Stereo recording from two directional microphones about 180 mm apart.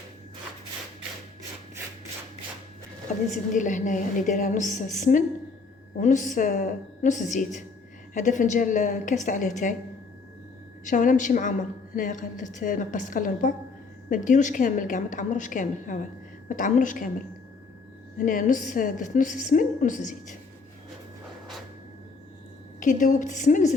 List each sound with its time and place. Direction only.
3.5 s a woman's voice: 45° left (ahead or behind)
10.8 s a woman's voice: 45° left (ahead or behind)
18.2 s a woman's voice: 45° left (ahead or behind)
22.8 s a woman's voice: 45° left (ahead or behind)